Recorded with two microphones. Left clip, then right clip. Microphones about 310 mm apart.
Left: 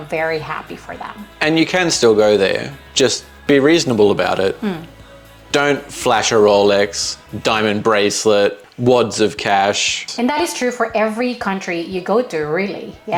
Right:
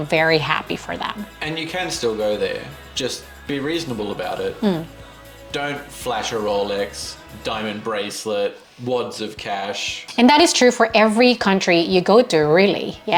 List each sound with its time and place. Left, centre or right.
0.1 s speech: right
1.4 s speech: left
10.2 s speech: right